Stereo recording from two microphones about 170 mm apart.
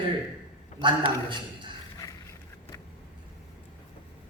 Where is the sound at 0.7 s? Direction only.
30° right (ahead or behind).